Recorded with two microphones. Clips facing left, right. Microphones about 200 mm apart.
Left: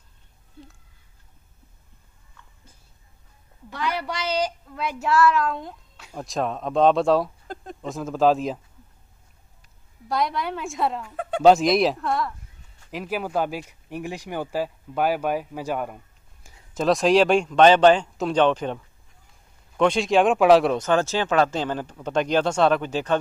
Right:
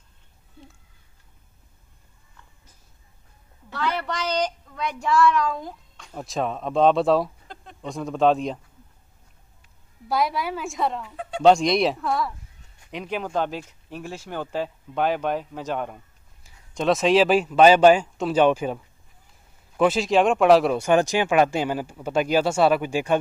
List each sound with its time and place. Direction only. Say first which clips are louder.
3.7 s speech: right 1 dB; 10° left (ahead or behind)
7.5 s a sound: left 7 dB; 45° left (ahead or behind)
7.8 s speech: even; centre (ahead or behind)
10.0 s speech: right 1 dB; 5° right (ahead or behind)
11.1 s a sound: left 4 dB; 55° left (ahead or behind)
11.4 s speech: left 1 dB; centre (ahead or behind)
12.3 s a sound: right 1 dB; 15° right (ahead or behind)
12.9 s speech: left 1 dB; 5° left (ahead or behind)
19.8 s speech: even; 5° right (ahead or behind)
20.8 s speech: right 2 dB; 15° right (ahead or behind)